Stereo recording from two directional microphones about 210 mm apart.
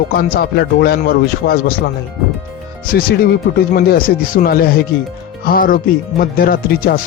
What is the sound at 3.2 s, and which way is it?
Speech, 45° left (ahead or behind).